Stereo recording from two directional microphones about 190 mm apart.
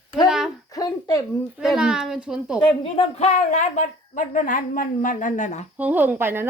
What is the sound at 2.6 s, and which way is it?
A woman's voice, 25° left (ahead or behind).